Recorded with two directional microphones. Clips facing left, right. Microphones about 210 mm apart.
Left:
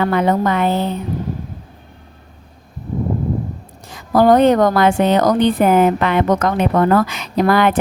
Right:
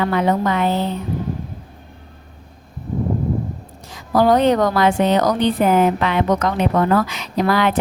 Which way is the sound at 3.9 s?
50° left (ahead or behind).